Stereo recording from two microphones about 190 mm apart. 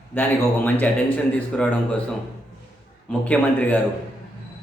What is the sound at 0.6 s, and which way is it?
A man's voice, 10° left (ahead or behind).